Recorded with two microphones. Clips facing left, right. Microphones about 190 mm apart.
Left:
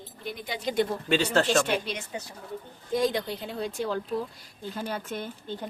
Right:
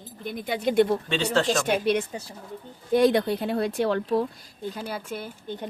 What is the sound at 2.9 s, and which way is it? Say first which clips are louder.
Speech: right 7 dB; 65° right (ahead or behind).